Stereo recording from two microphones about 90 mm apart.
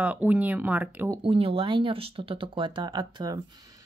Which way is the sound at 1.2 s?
90° right.